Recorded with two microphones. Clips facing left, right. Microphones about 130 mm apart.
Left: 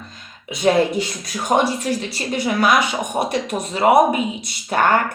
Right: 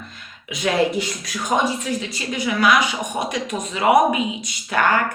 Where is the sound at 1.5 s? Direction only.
45° left (ahead or behind).